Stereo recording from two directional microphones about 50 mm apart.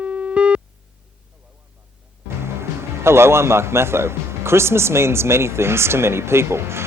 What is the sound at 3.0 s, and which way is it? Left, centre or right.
Speech, right.